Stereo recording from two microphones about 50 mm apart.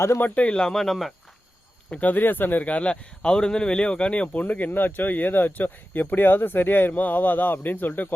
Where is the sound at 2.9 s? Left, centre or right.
Centre.